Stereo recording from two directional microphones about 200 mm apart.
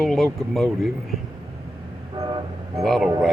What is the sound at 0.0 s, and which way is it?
Speech, centre (ahead or behind).